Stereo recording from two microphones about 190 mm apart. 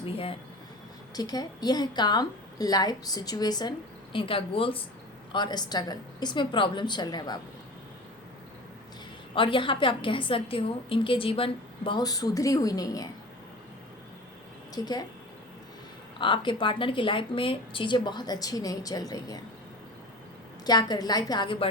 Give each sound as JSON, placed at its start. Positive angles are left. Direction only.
{"t": 0.0, "sound": "a woman's voice", "side_deg": 30}
{"t": 9.3, "sound": "a woman's voice", "side_deg": 25}
{"t": 14.8, "sound": "a woman's voice", "side_deg": 20}
{"t": 16.2, "sound": "a woman's voice", "side_deg": 25}
{"t": 20.7, "sound": "a woman's voice", "side_deg": 20}